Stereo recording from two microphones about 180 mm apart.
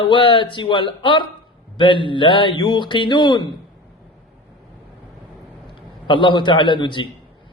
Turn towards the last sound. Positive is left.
turn(degrees=25)  # may be behind; listen again after turning